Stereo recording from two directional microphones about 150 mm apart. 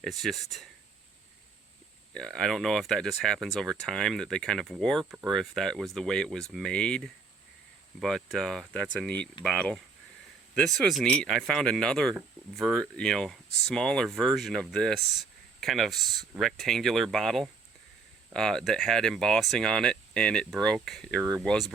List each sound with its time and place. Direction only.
0.0 s speech: centre (ahead or behind)
2.1 s speech: 5° left (ahead or behind)
21.2 s speech: 20° right (ahead or behind)
21.4 s speech: 5° left (ahead or behind)